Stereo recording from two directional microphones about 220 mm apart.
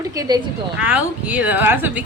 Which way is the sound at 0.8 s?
5° right (ahead or behind).